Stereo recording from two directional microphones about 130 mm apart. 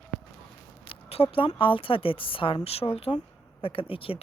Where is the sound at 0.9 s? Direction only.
45° left (ahead or behind).